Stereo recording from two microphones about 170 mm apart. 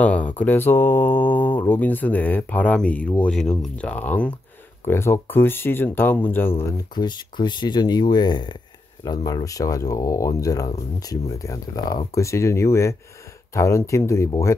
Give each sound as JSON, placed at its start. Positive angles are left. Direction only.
{"t": 0.0, "sound": "speech", "side_deg": 10}
{"t": 7.0, "sound": "speech", "side_deg": 25}